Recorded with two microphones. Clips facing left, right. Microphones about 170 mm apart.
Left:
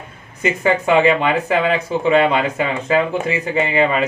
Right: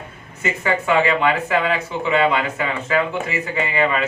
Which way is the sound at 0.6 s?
20° left (ahead or behind).